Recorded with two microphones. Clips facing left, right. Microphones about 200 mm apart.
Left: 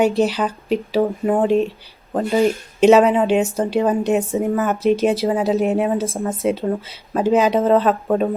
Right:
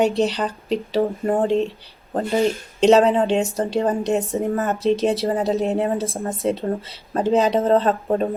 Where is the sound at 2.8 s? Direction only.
Centre (ahead or behind).